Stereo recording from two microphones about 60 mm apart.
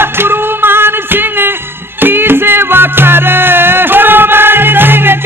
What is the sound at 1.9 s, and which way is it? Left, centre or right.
Music, right.